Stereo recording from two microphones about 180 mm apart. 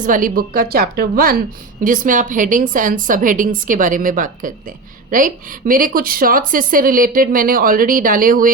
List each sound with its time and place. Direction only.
0.0 s a woman's voice: 50° right (ahead or behind)